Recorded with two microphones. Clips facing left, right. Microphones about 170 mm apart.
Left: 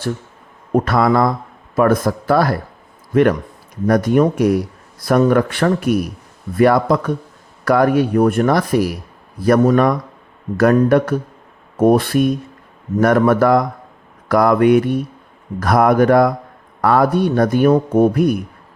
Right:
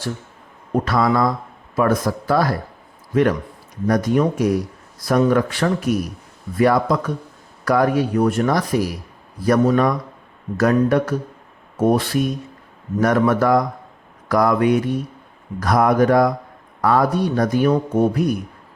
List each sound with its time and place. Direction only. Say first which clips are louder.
0.7 s speech: left 4 dB; 55° left (ahead or behind)
3.8 s speech: left 4 dB; 60° left (ahead or behind)